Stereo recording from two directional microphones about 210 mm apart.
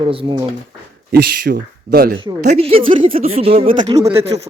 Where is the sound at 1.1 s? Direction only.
50° right (ahead or behind).